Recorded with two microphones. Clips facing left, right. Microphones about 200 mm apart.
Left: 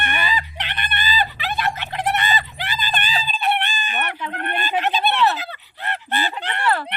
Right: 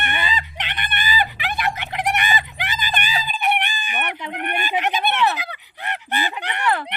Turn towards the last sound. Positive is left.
turn(degrees=-15)  # may be behind; listen again after turning